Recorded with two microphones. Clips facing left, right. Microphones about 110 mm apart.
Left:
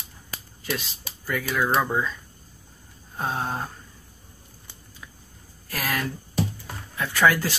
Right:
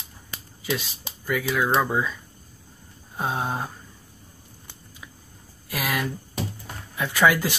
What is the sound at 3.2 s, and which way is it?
Speech, 10° right (ahead or behind).